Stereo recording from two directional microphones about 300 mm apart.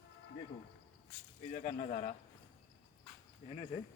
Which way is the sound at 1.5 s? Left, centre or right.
Left.